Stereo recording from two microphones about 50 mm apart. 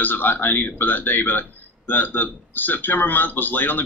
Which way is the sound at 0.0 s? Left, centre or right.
Left.